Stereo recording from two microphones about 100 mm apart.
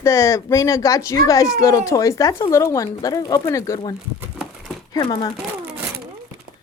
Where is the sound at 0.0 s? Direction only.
30° left (ahead or behind).